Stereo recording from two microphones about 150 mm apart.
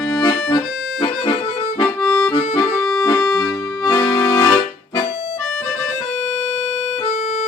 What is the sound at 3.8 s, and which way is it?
Accordion, 25° left (ahead or behind).